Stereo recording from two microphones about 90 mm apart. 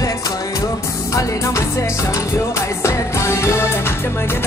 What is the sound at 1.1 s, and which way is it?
Music, 35° left (ahead or behind).